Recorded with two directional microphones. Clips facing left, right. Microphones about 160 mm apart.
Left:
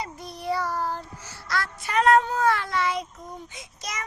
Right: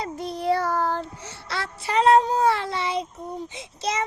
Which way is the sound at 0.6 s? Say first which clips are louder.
Right 4 dB; 50° right (ahead or behind).